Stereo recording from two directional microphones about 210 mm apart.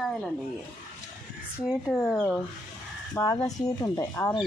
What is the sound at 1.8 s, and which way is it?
Speech, 10° left (ahead or behind).